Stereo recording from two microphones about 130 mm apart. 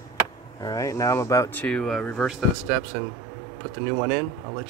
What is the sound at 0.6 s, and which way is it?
Speech, 25° left (ahead or behind).